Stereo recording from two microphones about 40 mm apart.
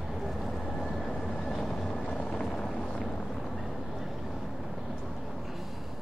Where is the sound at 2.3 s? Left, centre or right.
Left.